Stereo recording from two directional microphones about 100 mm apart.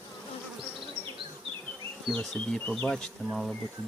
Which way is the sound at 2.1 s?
5° left (ahead or behind).